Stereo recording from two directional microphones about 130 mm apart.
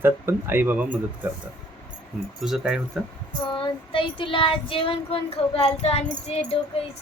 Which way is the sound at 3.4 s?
40° left (ahead or behind).